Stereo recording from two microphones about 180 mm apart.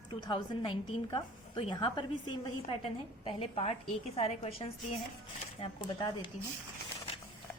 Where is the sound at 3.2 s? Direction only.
30° left (ahead or behind).